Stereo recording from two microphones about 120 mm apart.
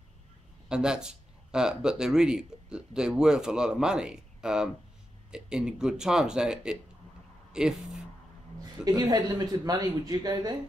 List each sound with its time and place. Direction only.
0.7 s speech: 5° right (ahead or behind)
8.8 s speech: 30° right (ahead or behind)